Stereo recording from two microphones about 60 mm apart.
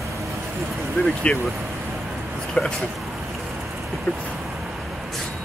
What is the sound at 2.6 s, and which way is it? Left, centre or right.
Speech, left.